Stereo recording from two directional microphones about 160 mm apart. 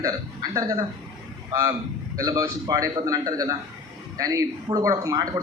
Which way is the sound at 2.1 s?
20° right (ahead or behind).